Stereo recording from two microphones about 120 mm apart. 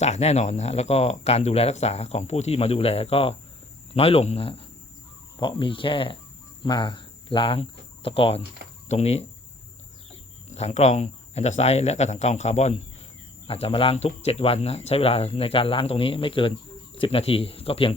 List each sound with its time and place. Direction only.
0.0 s speech: 65° left (ahead or behind)
8.9 s speech: 65° left (ahead or behind)
10.5 s speech: 70° left (ahead or behind)
13.5 s speech: 50° left (ahead or behind)